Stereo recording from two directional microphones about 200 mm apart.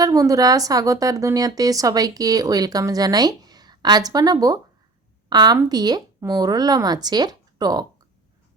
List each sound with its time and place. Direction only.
0.0 s a woman's voice: 15° right (ahead or behind)